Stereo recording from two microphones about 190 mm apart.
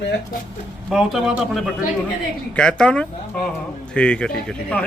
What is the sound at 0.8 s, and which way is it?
Speech, centre (ahead or behind).